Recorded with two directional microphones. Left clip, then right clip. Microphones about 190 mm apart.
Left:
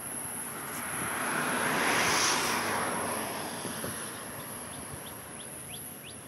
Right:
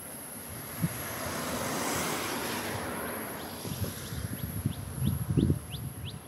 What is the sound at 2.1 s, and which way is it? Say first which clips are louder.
Vehicle: left 7 dB; 45° right (ahead or behind).